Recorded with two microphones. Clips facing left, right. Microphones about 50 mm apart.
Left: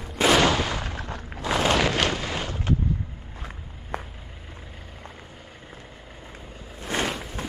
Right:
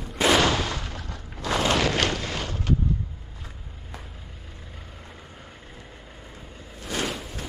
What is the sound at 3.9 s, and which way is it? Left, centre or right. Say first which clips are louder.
Vehicle: left 10 dB; left.